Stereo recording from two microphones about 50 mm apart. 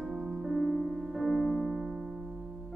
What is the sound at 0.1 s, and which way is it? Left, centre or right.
Music, centre.